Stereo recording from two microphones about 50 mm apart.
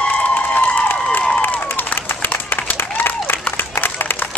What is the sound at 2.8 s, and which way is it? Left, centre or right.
Applause, left.